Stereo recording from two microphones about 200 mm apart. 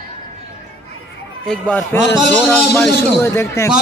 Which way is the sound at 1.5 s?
5° left (ahead or behind).